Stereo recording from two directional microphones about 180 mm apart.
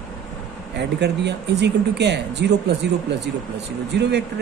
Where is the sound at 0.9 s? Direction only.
70° right (ahead or behind).